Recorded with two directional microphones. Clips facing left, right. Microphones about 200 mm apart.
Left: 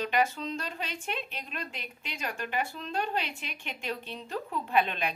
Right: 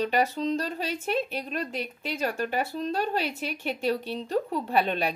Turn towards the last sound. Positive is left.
turn(degrees=-35)  # may be behind; listen again after turning